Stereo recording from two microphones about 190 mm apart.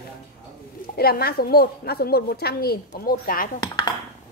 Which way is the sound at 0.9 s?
55° left (ahead or behind).